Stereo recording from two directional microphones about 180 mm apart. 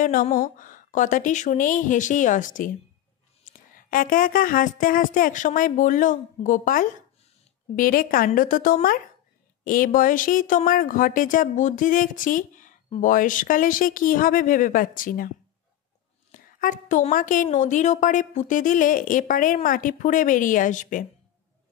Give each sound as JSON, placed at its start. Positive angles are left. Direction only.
{"t": 0.0, "sound": "speech", "side_deg": 50}